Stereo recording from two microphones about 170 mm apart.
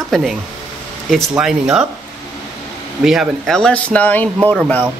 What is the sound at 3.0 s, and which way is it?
Speech, centre (ahead or behind).